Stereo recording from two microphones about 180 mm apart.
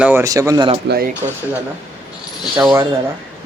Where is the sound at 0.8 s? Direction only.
60° right (ahead or behind).